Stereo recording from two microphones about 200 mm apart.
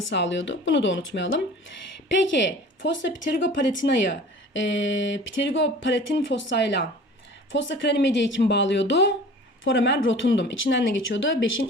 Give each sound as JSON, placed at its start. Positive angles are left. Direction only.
{"t": 0.1, "sound": "a woman's voice", "side_deg": 65}